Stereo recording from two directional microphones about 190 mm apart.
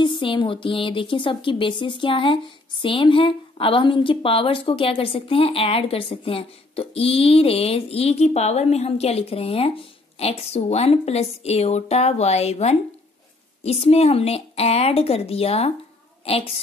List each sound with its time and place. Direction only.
0.0 s speech: 25° left (ahead or behind)